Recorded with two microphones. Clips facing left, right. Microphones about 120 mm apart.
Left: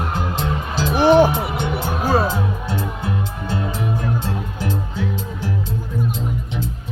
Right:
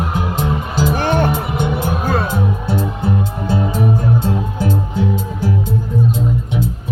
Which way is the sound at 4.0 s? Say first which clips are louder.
Right 6 dB; 15° right (ahead or behind).